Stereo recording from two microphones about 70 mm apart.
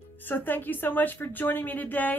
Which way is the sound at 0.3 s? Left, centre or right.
Left.